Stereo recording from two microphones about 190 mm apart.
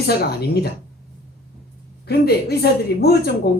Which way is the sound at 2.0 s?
55° left (ahead or behind).